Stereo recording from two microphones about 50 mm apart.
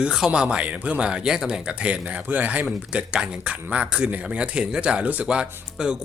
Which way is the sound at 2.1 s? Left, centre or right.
Right.